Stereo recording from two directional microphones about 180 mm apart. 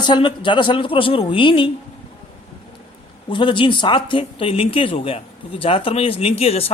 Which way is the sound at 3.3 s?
25° left (ahead or behind).